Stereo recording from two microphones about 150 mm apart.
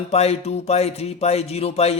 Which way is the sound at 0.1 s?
45° left (ahead or behind).